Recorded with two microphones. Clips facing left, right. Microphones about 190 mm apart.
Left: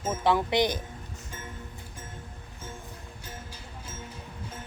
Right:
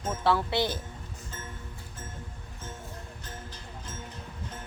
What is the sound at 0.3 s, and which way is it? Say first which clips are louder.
Speech: left 2 dB; 15° left (ahead or behind).